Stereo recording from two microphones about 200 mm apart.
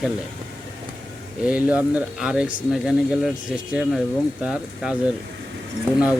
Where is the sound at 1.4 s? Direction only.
5° right (ahead or behind).